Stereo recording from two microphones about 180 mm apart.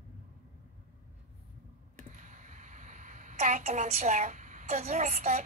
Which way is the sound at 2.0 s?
45° right (ahead or behind).